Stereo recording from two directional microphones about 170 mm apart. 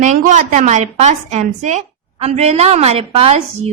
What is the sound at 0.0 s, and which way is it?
Speech, 45° right (ahead or behind).